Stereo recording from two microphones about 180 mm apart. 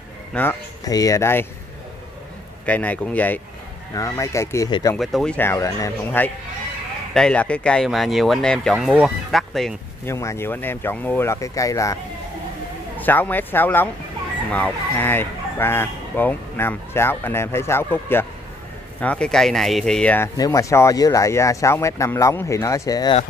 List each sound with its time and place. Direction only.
0.3 s speech: 10° left (ahead or behind)
2.6 s speech: 10° left (ahead or behind)
4.9 s speech: centre (ahead or behind)
10.0 s speech: 15° left (ahead or behind)
20.3 s speech: 20° left (ahead or behind)